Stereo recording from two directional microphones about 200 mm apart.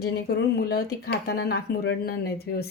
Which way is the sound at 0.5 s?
50° left (ahead or behind).